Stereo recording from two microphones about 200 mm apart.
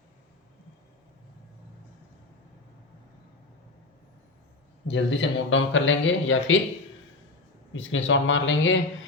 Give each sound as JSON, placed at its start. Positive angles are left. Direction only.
{"t": 4.9, "sound": "a man's voice", "side_deg": 65}
{"t": 7.7, "sound": "a man's voice", "side_deg": 70}